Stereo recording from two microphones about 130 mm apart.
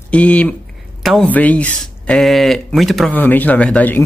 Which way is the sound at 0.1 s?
10° left (ahead or behind).